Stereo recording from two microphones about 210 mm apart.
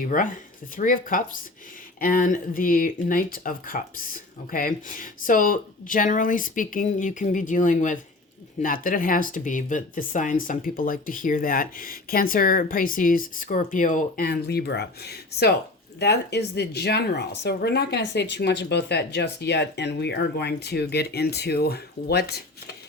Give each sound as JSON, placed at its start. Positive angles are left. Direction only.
{"t": 0.1, "sound": "speech", "side_deg": 40}